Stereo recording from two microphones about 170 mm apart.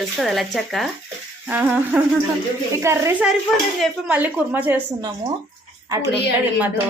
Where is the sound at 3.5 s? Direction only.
Centre (ahead or behind).